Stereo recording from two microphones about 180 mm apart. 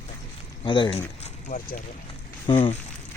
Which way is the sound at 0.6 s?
25° left (ahead or behind).